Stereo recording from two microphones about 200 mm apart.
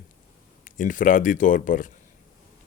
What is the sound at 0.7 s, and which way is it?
Speech, 40° left (ahead or behind).